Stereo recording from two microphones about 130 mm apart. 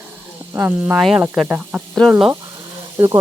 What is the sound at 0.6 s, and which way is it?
Speech, 10° right (ahead or behind).